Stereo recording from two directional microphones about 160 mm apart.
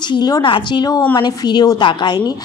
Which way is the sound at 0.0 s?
25° left (ahead or behind).